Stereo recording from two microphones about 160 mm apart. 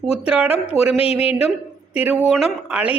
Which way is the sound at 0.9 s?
35° left (ahead or behind).